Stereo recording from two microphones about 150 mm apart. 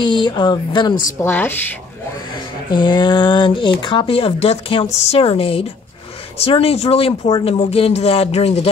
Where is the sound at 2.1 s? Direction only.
30° left (ahead or behind).